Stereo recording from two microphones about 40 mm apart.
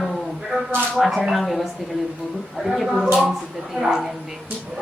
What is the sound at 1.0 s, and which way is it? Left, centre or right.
Speech, centre.